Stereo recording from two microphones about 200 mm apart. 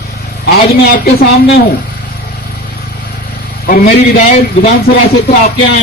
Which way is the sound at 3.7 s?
45° left (ahead or behind).